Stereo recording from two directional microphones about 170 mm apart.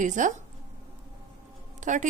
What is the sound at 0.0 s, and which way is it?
Speech, 45° right (ahead or behind).